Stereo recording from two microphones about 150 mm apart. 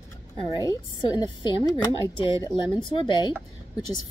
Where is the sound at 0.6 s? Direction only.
25° left (ahead or behind).